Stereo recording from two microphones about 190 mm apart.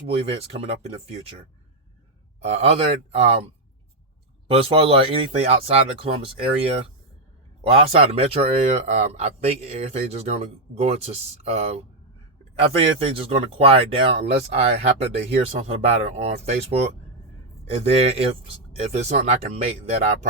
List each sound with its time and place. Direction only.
0.2 s speech: 30° right (ahead or behind)
2.4 s speech: 35° right (ahead or behind)
4.4 s speech: 30° right (ahead or behind)